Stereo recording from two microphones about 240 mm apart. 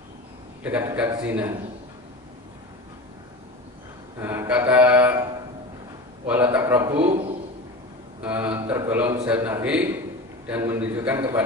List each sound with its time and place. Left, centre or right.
0.7 s a man's voice: centre
4.2 s mantra: centre
6.2 s a man's voice: centre
7.0 s a man's voice: right
8.2 s a man's voice: centre